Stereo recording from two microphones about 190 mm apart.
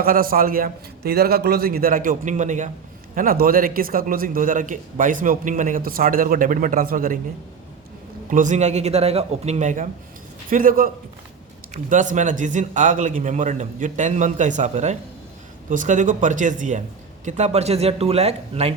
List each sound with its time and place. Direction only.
0.0 s a man's voice: 50° right (ahead or behind)
8.3 s a man's voice: 40° right (ahead or behind)